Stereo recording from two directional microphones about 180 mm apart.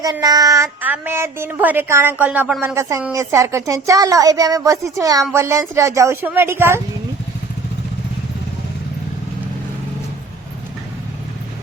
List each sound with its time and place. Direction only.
0.0 s speech: 20° right (ahead or behind)